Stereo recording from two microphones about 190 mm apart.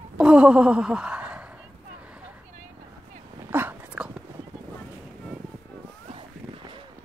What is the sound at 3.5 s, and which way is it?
Dog, 10° right (ahead or behind).